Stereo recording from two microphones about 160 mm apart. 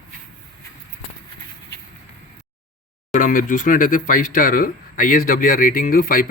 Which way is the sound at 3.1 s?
55° left (ahead or behind).